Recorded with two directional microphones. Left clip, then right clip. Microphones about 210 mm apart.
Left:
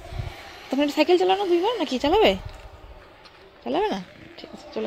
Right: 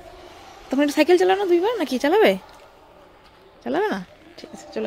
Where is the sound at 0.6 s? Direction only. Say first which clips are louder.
Right 3 dB; 15° right (ahead or behind).